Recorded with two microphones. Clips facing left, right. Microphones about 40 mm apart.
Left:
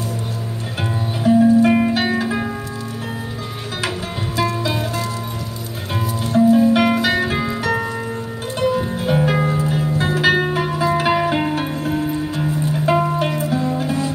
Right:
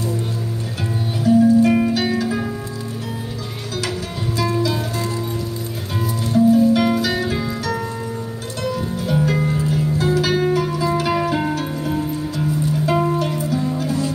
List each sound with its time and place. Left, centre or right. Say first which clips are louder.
1.2 s music: left 1 dB; left
4.4 s music: even; left
6.2 s music: left 1 dB; left
12.9 s music: left 1 dB; centre
13.4 s music: left 1 dB; left